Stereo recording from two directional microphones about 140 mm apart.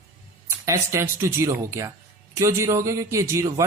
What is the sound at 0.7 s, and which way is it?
Speech, 20° right (ahead or behind).